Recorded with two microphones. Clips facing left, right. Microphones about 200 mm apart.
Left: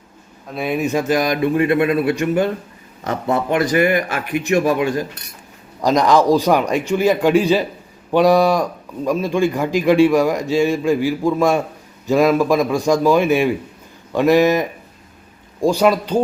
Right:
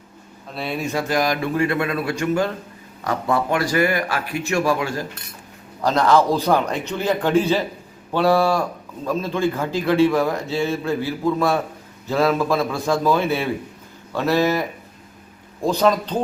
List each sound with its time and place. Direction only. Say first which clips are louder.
0.5 s a man's voice: left 5 dB; 15° left (ahead or behind)